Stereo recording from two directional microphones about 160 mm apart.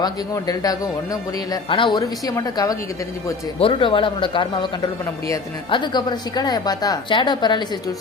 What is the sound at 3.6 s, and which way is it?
A woman's voice, 35° left (ahead or behind).